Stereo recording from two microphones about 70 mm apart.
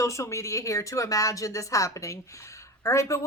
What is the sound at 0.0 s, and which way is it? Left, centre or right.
A woman's voice, left.